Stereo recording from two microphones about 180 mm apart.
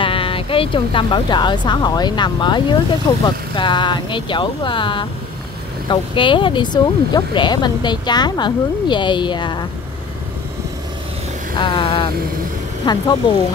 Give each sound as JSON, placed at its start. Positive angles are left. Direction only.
{"t": 0.0, "sound": "speech", "side_deg": 30}
{"t": 11.5, "sound": "speech", "side_deg": 25}